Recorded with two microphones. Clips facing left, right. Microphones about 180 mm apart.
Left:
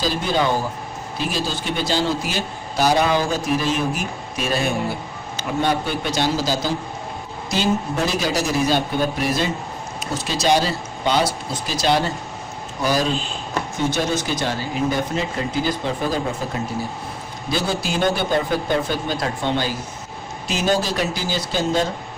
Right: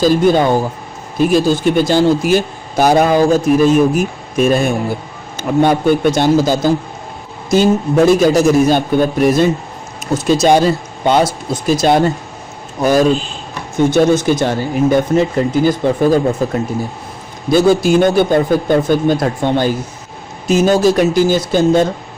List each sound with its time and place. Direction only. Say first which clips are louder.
0.0 s speech: right 10 dB; 50° right (ahead or behind)
17.5 s speech: right 13 dB; 50° right (ahead or behind)